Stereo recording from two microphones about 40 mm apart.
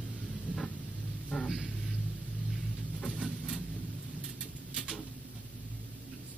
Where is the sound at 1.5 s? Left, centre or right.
Centre.